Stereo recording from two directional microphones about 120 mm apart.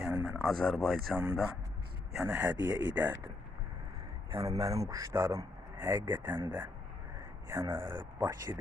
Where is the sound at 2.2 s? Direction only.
15° right (ahead or behind).